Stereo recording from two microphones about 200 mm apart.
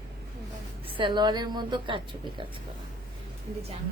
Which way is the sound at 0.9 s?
25° right (ahead or behind).